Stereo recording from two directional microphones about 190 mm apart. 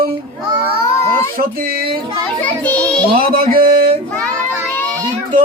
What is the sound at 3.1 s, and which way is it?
Speech, 50° right (ahead or behind).